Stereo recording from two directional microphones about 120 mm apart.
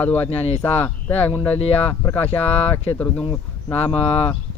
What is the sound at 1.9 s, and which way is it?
Speech, 15° left (ahead or behind).